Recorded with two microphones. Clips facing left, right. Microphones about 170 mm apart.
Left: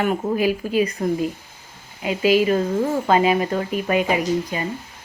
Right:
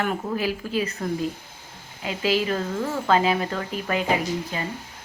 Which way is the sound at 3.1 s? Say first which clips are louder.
Left 3 dB; 15° left (ahead or behind).